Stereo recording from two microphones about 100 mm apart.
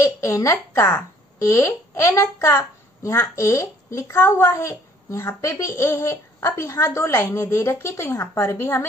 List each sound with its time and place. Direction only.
0.0 s a woman's voice: 30° left (ahead or behind)